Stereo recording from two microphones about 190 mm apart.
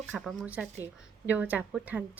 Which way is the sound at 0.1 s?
5° right (ahead or behind).